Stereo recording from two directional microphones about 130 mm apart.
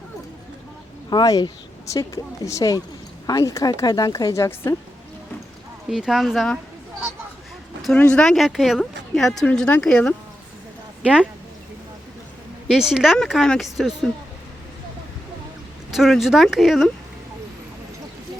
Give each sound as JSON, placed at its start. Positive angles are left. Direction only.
{"t": 1.1, "sound": "speech", "side_deg": 30}
{"t": 5.9, "sound": "speech", "side_deg": -5}
{"t": 7.9, "sound": "speech", "side_deg": 10}
{"t": 12.6, "sound": "speech", "side_deg": -5}
{"t": 15.9, "sound": "speech", "side_deg": 0}